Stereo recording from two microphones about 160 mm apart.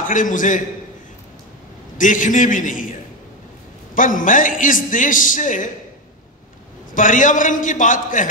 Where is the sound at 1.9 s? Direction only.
55° left (ahead or behind).